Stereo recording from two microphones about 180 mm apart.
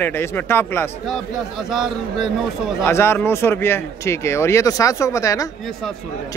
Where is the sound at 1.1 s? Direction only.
Centre (ahead or behind).